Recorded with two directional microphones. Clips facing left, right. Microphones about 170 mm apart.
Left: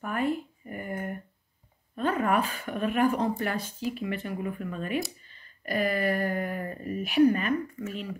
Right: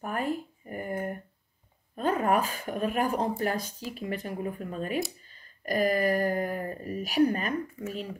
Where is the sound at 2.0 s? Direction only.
40° right (ahead or behind).